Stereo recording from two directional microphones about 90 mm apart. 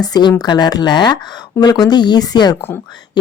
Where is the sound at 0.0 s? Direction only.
50° left (ahead or behind).